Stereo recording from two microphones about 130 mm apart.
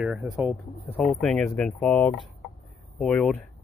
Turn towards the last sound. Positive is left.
turn(degrees=10)  # may be behind; listen again after turning